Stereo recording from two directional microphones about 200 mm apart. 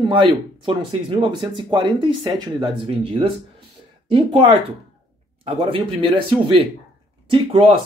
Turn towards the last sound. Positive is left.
turn(degrees=-30)  # may be behind; listen again after turning